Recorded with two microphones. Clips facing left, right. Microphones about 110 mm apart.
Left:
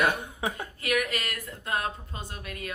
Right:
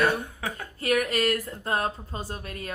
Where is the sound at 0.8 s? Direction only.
35° right (ahead or behind).